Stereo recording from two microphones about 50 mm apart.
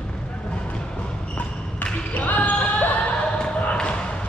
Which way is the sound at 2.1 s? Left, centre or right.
Left.